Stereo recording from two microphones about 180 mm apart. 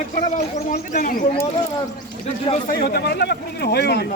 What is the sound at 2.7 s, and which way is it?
Speech, 60° left (ahead or behind).